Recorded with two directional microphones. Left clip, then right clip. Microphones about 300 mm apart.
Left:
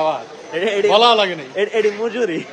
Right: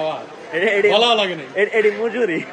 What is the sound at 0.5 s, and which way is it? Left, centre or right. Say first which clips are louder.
Speech: even; centre.